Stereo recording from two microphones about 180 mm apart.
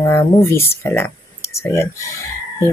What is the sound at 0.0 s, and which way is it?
Speech, 15° left (ahead or behind).